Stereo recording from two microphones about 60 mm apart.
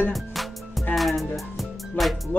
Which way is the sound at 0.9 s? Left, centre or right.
Centre.